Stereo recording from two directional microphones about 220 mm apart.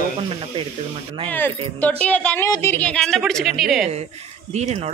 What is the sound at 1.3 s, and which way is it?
A woman's voice, 10° left (ahead or behind).